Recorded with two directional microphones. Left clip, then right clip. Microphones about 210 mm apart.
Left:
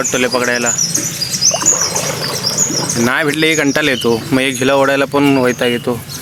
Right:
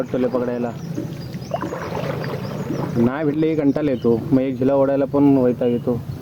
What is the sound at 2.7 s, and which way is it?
Bird, 30° left (ahead or behind).